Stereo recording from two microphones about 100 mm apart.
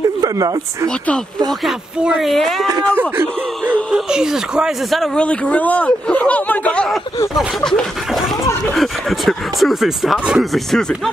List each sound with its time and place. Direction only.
0.0 s speech: 35° right (ahead or behind)
0.8 s speech: 10° left (ahead or behind)
3.0 s a sound: 20° right (ahead or behind)
3.9 s speech: 5° right (ahead or behind)